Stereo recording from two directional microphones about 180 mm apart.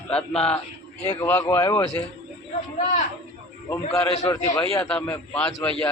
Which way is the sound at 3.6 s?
15° left (ahead or behind).